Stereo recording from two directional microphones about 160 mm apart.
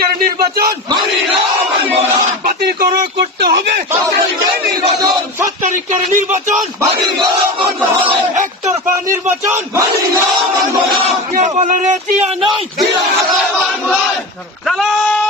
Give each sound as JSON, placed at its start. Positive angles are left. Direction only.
{"t": 0.3, "sound": "a man's voice", "side_deg": -70}
{"t": 2.5, "sound": "speech", "side_deg": -65}
{"t": 5.6, "sound": "speech", "side_deg": -50}
{"t": 8.4, "sound": "speech", "side_deg": -55}
{"t": 9.2, "sound": "speech", "side_deg": -15}
{"t": 11.3, "sound": "speech", "side_deg": -45}
{"t": 14.7, "sound": "speech", "side_deg": 0}